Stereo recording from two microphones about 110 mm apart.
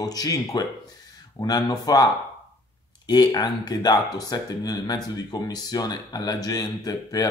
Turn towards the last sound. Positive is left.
turn(degrees=35)  # may be behind; listen again after turning